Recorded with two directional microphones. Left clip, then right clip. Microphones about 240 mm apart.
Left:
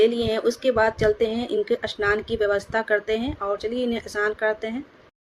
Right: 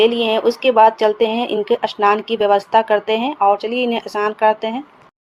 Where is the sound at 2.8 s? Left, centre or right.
Right.